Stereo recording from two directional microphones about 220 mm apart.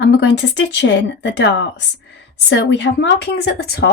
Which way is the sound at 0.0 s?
50° left (ahead or behind).